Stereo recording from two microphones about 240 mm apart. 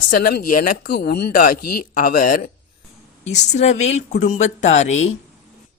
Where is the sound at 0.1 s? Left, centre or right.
Left.